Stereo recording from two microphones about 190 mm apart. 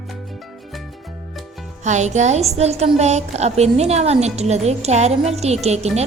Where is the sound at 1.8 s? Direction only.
40° right (ahead or behind).